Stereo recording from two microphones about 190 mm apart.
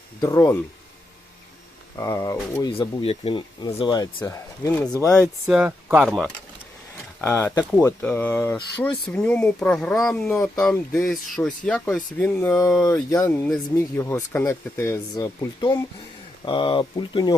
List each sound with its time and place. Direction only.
0.2 s speech: 20° left (ahead or behind)
2.0 s speech: 15° left (ahead or behind)
5.2 s speech: 10° right (ahead or behind)
7.2 s speech: 10° left (ahead or behind)
12.8 s speech: 20° left (ahead or behind)